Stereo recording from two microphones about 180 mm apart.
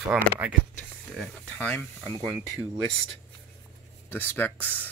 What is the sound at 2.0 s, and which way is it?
Speech, 20° right (ahead or behind).